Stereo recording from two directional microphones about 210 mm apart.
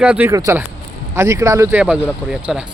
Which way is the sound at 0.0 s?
5° right (ahead or behind).